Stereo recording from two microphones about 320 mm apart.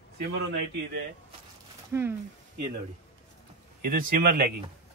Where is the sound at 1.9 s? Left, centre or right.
Centre.